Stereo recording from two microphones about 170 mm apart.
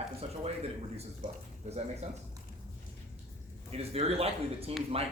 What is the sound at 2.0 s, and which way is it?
Speech, 40° right (ahead or behind).